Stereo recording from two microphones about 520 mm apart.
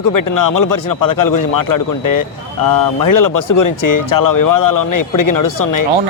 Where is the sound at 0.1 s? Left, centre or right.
Left.